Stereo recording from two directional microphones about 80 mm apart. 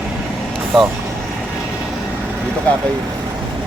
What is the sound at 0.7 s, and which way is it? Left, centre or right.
Speech, centre.